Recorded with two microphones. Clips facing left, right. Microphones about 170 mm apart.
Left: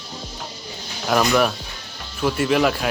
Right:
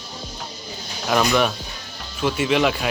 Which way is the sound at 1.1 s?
Centre (ahead or behind).